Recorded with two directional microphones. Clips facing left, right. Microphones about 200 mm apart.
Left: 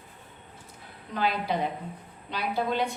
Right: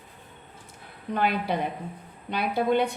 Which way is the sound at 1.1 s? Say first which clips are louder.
Right 2 dB; 55° right (ahead or behind).